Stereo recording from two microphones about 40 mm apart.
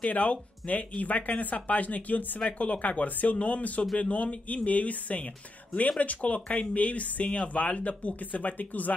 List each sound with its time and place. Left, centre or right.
0.0 s speech: left